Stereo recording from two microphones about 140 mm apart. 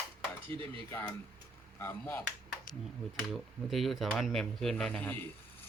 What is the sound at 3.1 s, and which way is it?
Speech, centre (ahead or behind).